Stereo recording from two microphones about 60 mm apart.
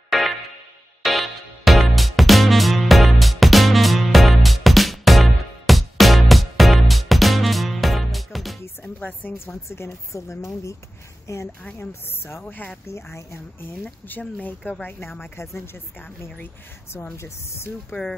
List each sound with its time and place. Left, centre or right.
0.1 s music: centre
8.8 s music: left
9.7 s speech: left
11.8 s speech: left
12.4 s speech: left
12.8 s speech: left